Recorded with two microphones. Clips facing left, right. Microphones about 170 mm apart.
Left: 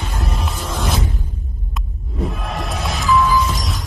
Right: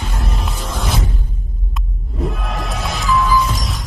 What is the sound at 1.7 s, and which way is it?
Music, centre (ahead or behind).